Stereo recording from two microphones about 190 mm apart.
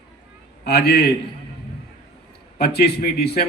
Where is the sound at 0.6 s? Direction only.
55° left (ahead or behind).